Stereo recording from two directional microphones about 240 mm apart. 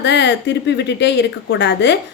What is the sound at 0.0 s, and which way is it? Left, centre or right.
Speech, left.